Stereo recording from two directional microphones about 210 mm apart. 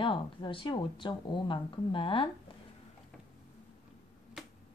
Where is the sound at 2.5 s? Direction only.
25° left (ahead or behind).